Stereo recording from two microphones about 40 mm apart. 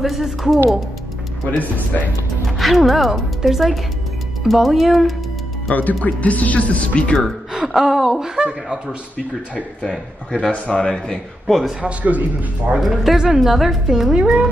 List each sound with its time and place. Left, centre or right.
0.0 s speech: centre
2.4 s speech: centre
5.7 s speech: left
7.5 s a sound: centre
8.4 s a child's voice: right
9.8 s a man's voice: centre
11.4 s speech: centre
11.8 s a man's voice: right
12.9 s a woman's voice: centre
14.1 s a child's voice: right